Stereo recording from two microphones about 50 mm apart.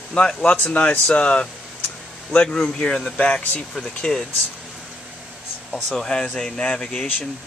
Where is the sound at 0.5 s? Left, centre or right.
Left.